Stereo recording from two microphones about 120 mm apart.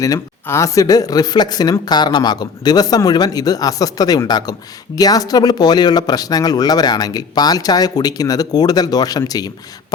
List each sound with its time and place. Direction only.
0.0 s speech: 25° left (ahead or behind)